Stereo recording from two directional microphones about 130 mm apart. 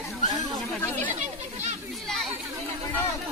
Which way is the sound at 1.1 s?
60° right (ahead or behind).